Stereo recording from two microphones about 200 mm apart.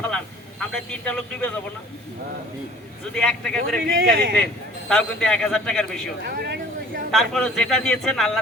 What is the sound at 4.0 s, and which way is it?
Speech, 45° right (ahead or behind).